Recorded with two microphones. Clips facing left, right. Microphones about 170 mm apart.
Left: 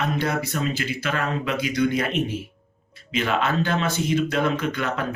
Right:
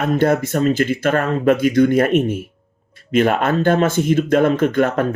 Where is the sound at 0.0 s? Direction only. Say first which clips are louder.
Right 8 dB; 50° right (ahead or behind).